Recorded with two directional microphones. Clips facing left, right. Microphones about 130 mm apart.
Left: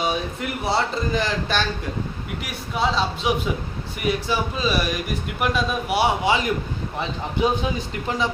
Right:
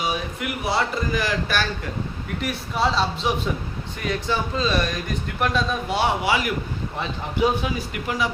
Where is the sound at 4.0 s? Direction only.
10° left (ahead or behind).